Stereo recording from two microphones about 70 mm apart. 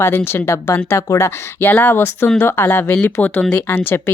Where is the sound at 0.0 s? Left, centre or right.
Left.